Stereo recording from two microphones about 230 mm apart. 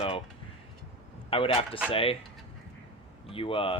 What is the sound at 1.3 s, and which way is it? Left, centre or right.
Speech, left.